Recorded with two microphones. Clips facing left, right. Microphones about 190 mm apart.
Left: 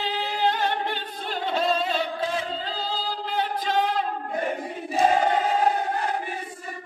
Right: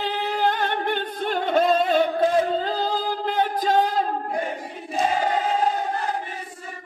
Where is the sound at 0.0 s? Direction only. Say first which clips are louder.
Right 2 dB; 55° right (ahead or behind).